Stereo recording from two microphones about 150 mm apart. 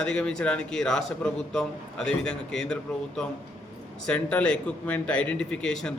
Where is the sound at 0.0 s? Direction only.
5° left (ahead or behind).